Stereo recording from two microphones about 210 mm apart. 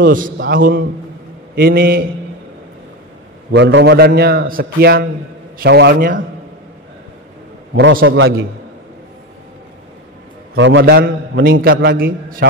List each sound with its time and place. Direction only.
0.0 s a man's voice: 40° right (ahead or behind)
3.5 s a man's voice: 55° right (ahead or behind)
7.7 s a man's voice: 65° right (ahead or behind)
10.5 s a man's voice: 60° right (ahead or behind)